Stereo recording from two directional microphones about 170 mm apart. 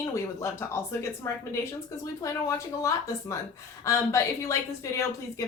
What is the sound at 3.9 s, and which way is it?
Speech, 15° left (ahead or behind).